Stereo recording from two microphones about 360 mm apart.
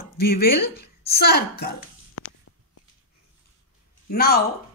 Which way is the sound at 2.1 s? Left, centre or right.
Left.